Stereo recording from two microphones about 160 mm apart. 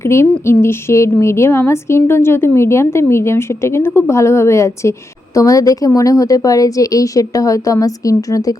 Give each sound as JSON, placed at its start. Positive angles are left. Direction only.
{"t": 0.0, "sound": "a woman's voice", "side_deg": 15}